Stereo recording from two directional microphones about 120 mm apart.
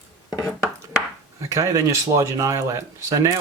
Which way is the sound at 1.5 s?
25° right (ahead or behind).